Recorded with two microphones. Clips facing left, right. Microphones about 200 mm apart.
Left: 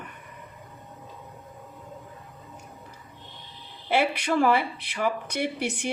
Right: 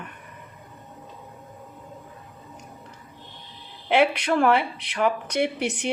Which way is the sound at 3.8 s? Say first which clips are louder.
Right 4 dB; 65° right (ahead or behind).